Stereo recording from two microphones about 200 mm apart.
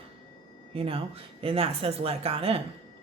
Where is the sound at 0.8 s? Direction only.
25° right (ahead or behind).